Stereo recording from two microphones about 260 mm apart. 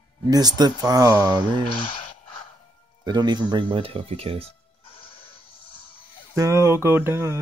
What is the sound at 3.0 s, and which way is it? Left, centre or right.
Speech, centre.